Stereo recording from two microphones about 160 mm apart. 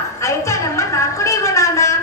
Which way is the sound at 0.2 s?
20° left (ahead or behind).